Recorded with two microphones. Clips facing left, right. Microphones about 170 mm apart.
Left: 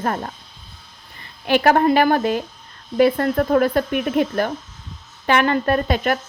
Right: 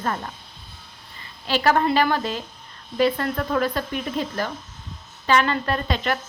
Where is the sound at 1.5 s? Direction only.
50° left (ahead or behind).